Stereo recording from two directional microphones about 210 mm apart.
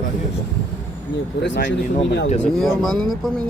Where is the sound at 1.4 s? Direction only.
60° left (ahead or behind).